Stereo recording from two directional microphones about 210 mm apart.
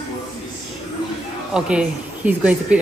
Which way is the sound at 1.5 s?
5° right (ahead or behind).